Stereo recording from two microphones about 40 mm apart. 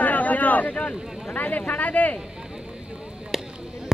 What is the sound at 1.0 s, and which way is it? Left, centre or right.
Speech, centre.